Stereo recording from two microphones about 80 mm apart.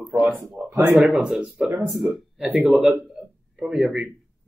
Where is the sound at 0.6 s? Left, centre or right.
Right.